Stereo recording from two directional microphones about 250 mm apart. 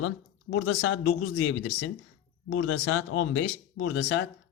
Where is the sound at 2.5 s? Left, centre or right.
Left.